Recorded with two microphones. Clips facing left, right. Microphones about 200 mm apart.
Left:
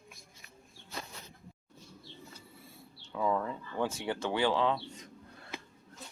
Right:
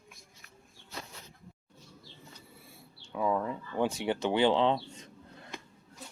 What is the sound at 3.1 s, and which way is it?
Speech, 10° right (ahead or behind).